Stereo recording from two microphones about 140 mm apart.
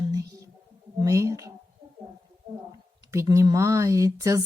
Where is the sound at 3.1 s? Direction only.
20° right (ahead or behind).